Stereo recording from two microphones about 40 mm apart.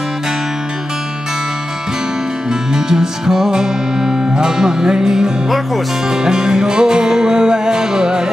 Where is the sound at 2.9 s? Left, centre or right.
Centre.